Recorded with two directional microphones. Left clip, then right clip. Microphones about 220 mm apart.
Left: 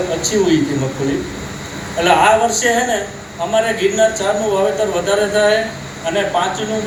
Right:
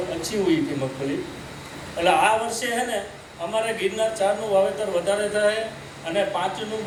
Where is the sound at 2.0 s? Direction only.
25° right (ahead or behind).